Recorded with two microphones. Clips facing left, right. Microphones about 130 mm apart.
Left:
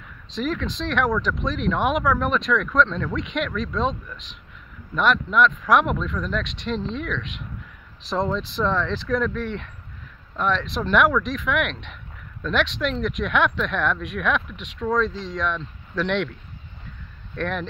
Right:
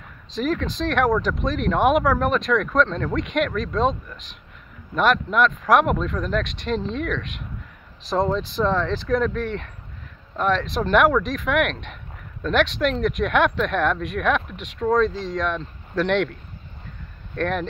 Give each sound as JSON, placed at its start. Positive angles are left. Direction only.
{"t": 0.3, "sound": "speech", "side_deg": -45}
{"t": 17.4, "sound": "speech", "side_deg": -45}